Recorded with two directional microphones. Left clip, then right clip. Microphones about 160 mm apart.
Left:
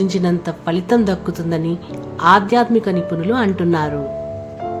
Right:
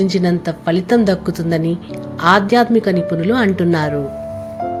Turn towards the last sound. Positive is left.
turn(degrees=-10)  # may be behind; listen again after turning